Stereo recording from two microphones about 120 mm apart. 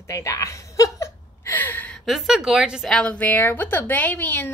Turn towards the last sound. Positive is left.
turn(degrees=15)  # may be behind; listen again after turning